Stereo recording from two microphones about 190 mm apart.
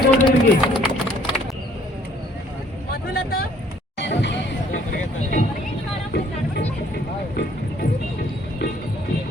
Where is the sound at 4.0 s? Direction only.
65° left (ahead or behind).